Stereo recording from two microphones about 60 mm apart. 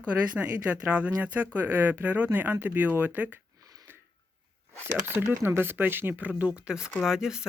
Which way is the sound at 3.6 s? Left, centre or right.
Right.